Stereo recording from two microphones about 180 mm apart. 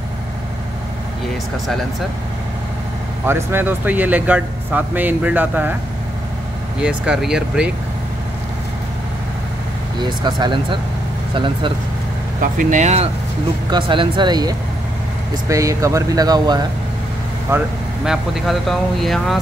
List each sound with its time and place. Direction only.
3.3 s speech: 15° right (ahead or behind)
6.8 s speech: 5° right (ahead or behind)
9.9 s speech: 25° right (ahead or behind)
12.4 s speech: 45° right (ahead or behind)
13.7 s speech: 25° right (ahead or behind)
18.0 s speech: centre (ahead or behind)